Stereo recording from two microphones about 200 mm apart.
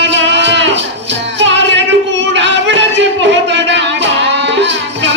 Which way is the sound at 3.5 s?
60° right (ahead or behind).